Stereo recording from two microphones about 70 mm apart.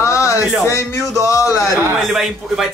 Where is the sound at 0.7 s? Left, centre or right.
Left.